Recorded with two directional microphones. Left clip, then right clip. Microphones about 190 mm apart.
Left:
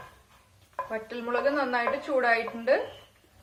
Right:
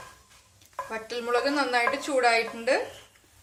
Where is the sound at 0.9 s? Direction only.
50° right (ahead or behind).